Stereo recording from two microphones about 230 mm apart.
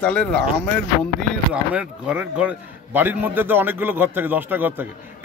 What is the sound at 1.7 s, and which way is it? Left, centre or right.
A man's voice, centre.